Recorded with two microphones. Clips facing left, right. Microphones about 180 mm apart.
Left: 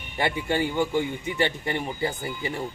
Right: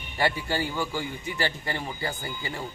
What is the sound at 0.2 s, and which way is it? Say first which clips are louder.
Speech: left 2 dB; 20° left (ahead or behind).